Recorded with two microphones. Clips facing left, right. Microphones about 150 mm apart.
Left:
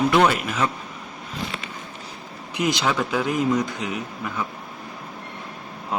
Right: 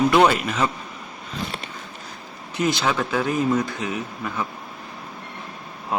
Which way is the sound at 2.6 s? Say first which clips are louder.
Even; 15° left (ahead or behind).